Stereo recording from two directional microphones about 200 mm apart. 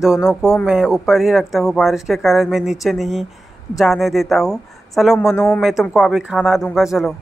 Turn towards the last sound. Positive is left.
turn(degrees=0)  # may be behind; listen again after turning